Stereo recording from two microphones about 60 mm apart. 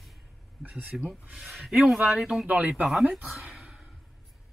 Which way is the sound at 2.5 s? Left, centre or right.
Right.